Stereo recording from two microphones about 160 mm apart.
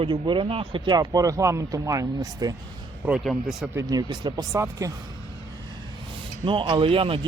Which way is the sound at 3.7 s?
25° right (ahead or behind).